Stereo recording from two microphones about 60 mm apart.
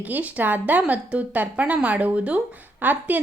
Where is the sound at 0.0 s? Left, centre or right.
Right.